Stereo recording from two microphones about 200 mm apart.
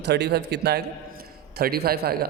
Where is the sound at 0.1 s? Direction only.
55° right (ahead or behind).